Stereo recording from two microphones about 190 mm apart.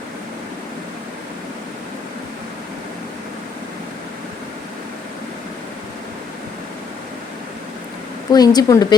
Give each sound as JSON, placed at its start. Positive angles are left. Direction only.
{"t": 8.3, "sound": "speech", "side_deg": 20}